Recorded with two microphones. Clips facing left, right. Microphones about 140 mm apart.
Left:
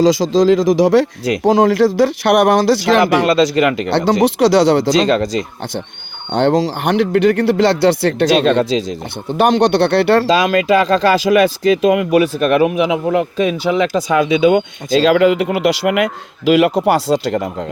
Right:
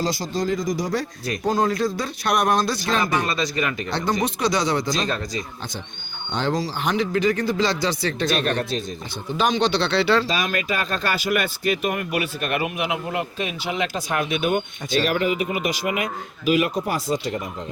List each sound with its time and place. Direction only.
0.0 s speech: 90° left
9.4 s speech: 60° left (ahead or behind)
10.3 s speech: 90° left
13.9 s speech: 90° left